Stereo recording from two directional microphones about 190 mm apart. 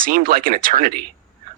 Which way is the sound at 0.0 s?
50° right (ahead or behind).